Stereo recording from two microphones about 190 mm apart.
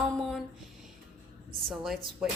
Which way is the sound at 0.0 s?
Centre (ahead or behind).